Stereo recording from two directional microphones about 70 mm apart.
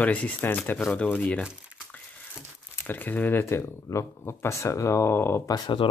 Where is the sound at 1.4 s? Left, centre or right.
Centre.